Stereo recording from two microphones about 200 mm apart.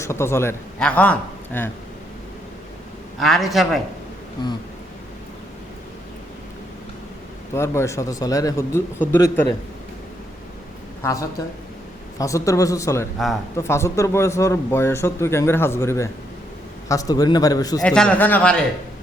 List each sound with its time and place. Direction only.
0.0 s a man's voice: 15° left (ahead or behind)
3.2 s a man's voice: centre (ahead or behind)
7.5 s a man's voice: 15° left (ahead or behind)
11.0 s a man's voice: 15° left (ahead or behind)
17.8 s a man's voice: 5° left (ahead or behind)